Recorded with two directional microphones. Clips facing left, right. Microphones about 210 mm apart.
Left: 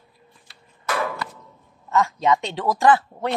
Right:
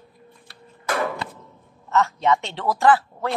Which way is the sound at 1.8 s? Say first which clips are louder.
Even; 15° left (ahead or behind).